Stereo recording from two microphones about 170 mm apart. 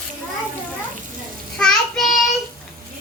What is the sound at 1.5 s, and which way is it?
Speech, 5° left (ahead or behind).